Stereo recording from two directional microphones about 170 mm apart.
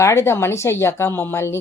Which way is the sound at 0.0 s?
15° left (ahead or behind).